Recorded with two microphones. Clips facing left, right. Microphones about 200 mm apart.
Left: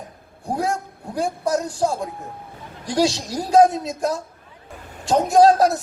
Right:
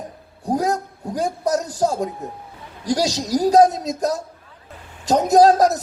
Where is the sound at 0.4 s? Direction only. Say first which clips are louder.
Right 3 dB; 40° right (ahead or behind).